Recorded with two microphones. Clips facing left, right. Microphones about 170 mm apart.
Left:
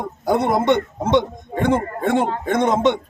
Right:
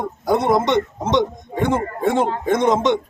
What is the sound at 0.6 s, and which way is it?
A man's voice, 55° left (ahead or behind).